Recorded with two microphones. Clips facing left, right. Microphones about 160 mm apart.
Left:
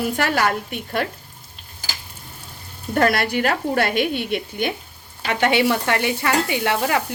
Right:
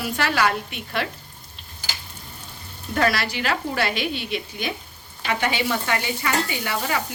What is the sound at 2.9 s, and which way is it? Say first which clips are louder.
Speech: left 4 dB; 50° left (ahead or behind).